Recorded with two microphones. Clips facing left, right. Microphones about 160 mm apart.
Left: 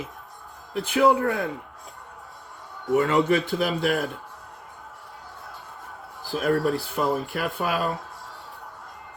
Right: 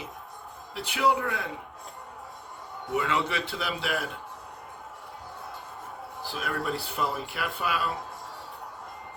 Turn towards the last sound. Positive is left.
turn(degrees=45)  # may be behind; listen again after turning